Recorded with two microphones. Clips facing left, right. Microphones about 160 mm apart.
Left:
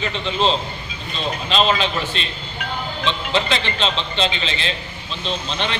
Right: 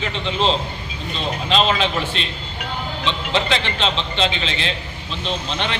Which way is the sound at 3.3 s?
15° right (ahead or behind).